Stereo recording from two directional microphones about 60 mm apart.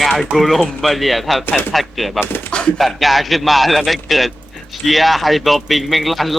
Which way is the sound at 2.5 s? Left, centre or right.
Centre.